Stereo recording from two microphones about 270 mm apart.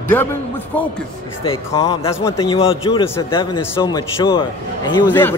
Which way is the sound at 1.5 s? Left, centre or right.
Centre.